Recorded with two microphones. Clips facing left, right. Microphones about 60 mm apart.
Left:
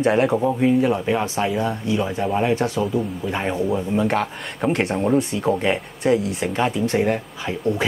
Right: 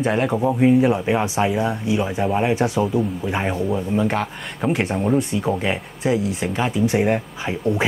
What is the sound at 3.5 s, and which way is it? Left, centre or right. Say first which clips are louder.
Speech: even; centre.